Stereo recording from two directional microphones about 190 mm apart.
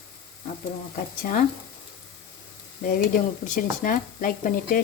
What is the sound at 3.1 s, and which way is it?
Speech, 45° left (ahead or behind).